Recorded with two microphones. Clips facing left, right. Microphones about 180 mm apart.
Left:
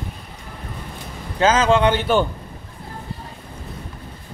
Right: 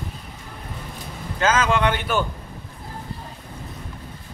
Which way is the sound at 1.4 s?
30° left (ahead or behind).